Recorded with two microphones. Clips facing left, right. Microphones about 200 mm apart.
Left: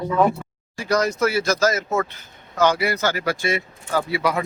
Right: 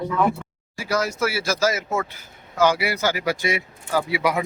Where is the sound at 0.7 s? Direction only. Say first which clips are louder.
Left 3 dB; 5° right (ahead or behind).